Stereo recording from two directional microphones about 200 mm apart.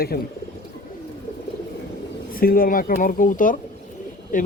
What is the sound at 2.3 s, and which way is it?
A man's voice, 45° left (ahead or behind).